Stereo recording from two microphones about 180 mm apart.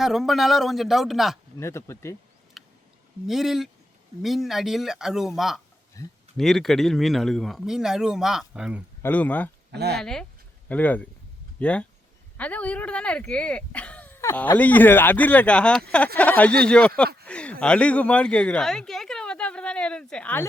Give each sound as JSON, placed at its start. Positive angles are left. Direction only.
{"t": 0.0, "sound": "speech", "side_deg": 0}
{"t": 1.5, "sound": "speech", "side_deg": 15}
{"t": 2.6, "sound": "a sound", "side_deg": 0}
{"t": 3.2, "sound": "speech", "side_deg": 0}
{"t": 6.0, "sound": "speech", "side_deg": 20}
{"t": 6.3, "sound": "speech", "side_deg": 0}
{"t": 9.0, "sound": "speech", "side_deg": 10}
{"t": 9.7, "sound": "speech", "side_deg": -65}
{"t": 10.0, "sound": "speech", "side_deg": 5}